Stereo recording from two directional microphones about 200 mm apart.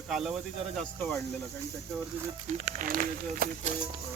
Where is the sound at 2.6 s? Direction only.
35° right (ahead or behind).